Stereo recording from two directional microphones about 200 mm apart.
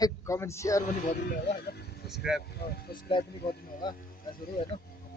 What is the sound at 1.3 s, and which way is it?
Speech, 50° left (ahead or behind).